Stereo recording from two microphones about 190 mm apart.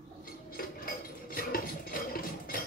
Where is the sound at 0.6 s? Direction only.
50° left (ahead or behind).